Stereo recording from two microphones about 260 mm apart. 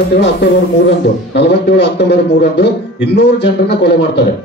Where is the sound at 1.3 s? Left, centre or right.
Left.